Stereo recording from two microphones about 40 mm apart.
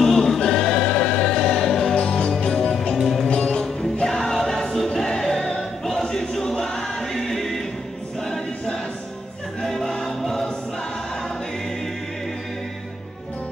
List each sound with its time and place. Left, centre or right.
0.0 s choir: centre
0.5 s music: centre
2.0 s music: left
2.3 s music: centre
5.6 s choir: centre
9.6 s choir: centre